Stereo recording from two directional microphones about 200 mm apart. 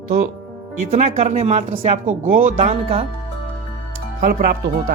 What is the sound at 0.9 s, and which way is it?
A woman's voice, 35° right (ahead or behind).